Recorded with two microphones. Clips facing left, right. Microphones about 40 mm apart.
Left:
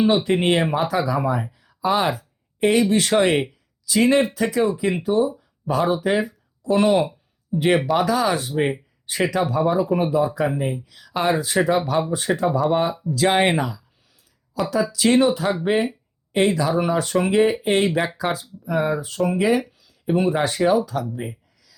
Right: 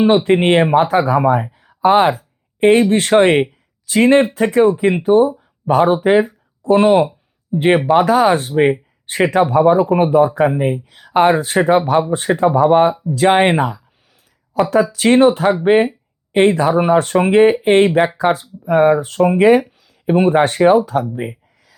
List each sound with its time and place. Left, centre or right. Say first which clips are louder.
0.3 s speech: right 7 dB; right
1.5 s a sound: right 10 dB; right
2.9 s speech: right 6 dB; right